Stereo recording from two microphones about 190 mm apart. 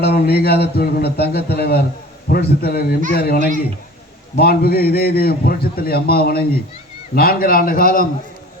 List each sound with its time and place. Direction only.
0.0 s a man's voice: 60° left (ahead or behind)